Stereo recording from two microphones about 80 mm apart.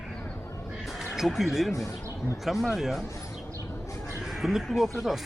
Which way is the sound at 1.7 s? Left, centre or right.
Left.